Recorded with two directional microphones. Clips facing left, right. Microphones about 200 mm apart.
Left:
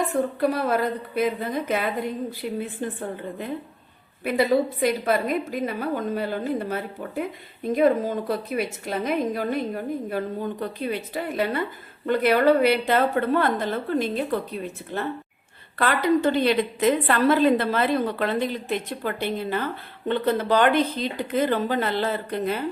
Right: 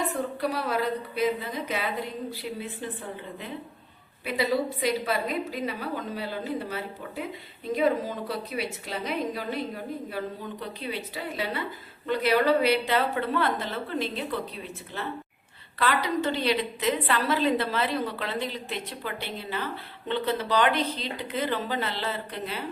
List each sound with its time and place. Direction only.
0.3 s a woman's voice: 50° left (ahead or behind)